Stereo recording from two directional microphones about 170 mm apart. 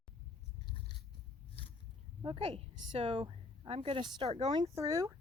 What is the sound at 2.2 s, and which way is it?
Speech, 30° right (ahead or behind).